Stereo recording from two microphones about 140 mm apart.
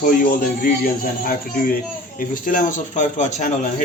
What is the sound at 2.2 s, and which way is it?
A man's voice, 75° left (ahead or behind).